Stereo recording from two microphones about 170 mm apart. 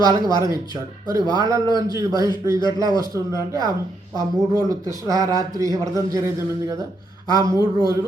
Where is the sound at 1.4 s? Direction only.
20° right (ahead or behind).